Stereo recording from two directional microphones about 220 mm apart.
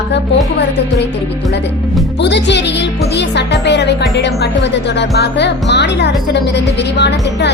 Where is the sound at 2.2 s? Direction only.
50° left (ahead or behind).